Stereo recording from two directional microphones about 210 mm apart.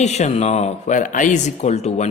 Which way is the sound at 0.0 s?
30° left (ahead or behind).